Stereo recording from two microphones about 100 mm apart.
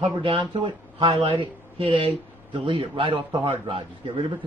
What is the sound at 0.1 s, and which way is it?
Speech, 55° right (ahead or behind).